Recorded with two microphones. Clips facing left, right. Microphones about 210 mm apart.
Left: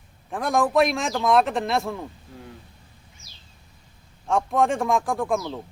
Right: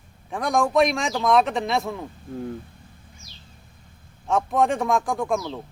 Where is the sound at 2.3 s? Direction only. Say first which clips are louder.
Right 11 dB; 50° right (ahead or behind).